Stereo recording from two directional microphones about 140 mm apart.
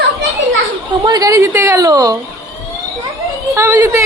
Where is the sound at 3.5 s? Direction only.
20° right (ahead or behind).